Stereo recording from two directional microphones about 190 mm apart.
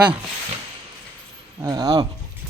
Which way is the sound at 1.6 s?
20° right (ahead or behind).